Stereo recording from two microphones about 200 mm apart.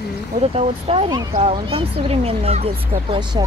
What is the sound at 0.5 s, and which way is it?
Speech, 30° right (ahead or behind).